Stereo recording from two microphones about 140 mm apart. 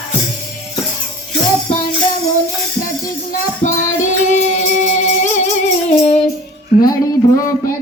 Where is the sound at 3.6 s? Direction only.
60° left (ahead or behind).